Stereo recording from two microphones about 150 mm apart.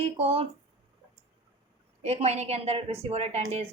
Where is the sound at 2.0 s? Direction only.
45° right (ahead or behind).